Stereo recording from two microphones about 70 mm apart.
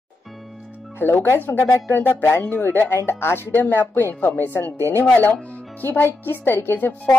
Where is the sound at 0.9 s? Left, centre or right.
Left.